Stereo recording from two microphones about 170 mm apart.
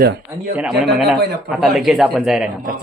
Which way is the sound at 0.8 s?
75° right (ahead or behind).